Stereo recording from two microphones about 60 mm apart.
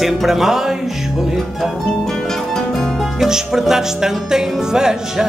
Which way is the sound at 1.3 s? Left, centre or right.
Centre.